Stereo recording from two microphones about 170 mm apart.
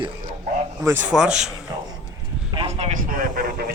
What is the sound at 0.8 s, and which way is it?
Speech, 10° right (ahead or behind).